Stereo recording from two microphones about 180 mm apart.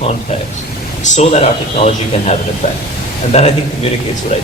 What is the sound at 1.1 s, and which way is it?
Speech, 40° left (ahead or behind).